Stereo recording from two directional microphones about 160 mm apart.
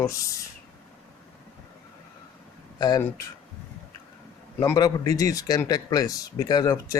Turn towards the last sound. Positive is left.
turn(degrees=20)  # may be behind; listen again after turning